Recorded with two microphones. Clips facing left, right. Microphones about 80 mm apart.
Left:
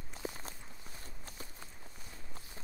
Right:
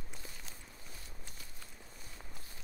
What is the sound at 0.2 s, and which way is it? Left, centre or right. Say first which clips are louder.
Walk: left 9 dB; left.